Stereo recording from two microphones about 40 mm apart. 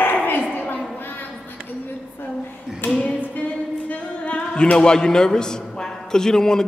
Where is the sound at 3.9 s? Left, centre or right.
Left; by 6.6 s centre.